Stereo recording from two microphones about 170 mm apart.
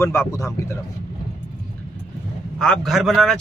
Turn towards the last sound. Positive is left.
turn(degrees=0)  # may be behind; listen again after turning